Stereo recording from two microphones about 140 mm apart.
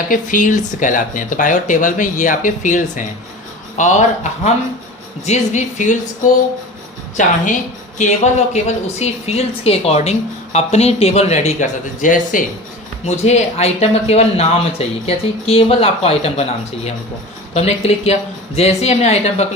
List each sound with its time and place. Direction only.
0.1 s speech: 70° left (ahead or behind)
7.2 s speech: 60° left (ahead or behind)
13.1 s speech: 50° left (ahead or behind)